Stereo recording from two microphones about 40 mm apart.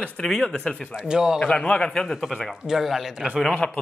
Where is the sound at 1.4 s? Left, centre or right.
Left.